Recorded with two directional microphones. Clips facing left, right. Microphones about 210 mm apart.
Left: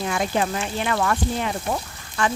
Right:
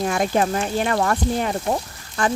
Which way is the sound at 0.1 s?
45° right (ahead or behind).